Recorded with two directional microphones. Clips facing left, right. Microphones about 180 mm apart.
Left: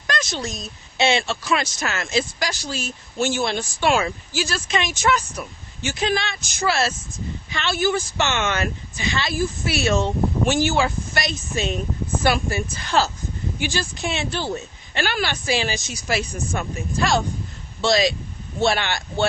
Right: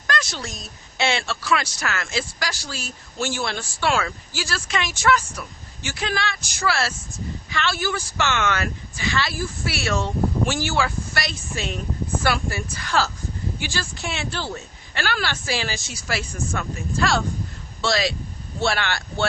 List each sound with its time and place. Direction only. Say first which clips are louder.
0.1 s a woman's voice: left 2 dB; 20° left (ahead or behind)